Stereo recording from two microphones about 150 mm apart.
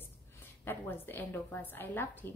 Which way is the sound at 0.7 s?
15° left (ahead or behind).